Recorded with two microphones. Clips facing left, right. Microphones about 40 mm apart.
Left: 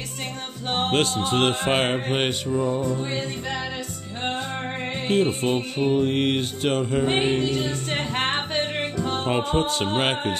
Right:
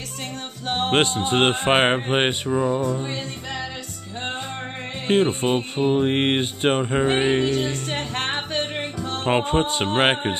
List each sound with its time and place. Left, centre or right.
0.9 s music: right
2.8 s music: centre
5.0 s music: right; by 7.7 s centre
7.9 s music: centre
9.2 s music: right